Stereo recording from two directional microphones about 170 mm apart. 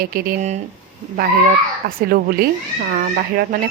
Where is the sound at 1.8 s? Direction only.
60° right (ahead or behind).